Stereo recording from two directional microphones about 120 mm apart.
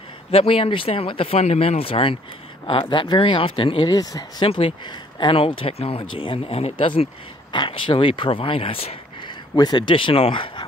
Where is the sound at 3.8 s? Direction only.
30° left (ahead or behind).